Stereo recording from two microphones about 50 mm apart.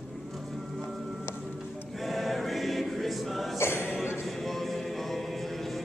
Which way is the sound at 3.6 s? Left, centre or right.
Left.